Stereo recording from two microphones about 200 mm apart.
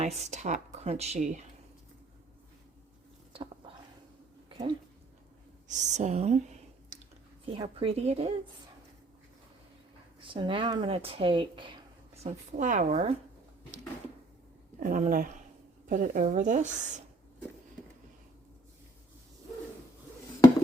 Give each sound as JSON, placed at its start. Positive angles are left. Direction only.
{"t": 0.0, "sound": "speech", "side_deg": -35}
{"t": 3.3, "sound": "a sound", "side_deg": -30}
{"t": 5.6, "sound": "speech", "side_deg": -35}
{"t": 6.9, "sound": "a sound", "side_deg": -35}
{"t": 7.5, "sound": "a woman's voice", "side_deg": -25}
{"t": 10.2, "sound": "speech", "side_deg": -25}
{"t": 14.8, "sound": "speech", "side_deg": -40}